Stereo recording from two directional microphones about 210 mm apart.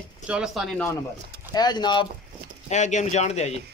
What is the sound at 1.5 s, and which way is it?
Speech, 20° left (ahead or behind).